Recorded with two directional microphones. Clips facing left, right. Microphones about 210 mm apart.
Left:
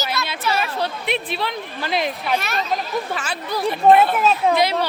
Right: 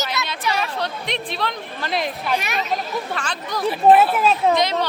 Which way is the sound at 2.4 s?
15° right (ahead or behind).